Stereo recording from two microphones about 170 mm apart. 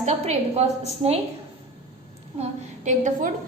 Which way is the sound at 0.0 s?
40° right (ahead or behind).